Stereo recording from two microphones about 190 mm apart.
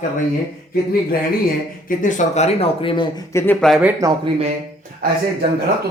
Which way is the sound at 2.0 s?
40° left (ahead or behind).